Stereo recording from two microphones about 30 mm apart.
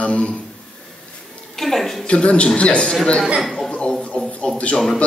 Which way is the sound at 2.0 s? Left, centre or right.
Left.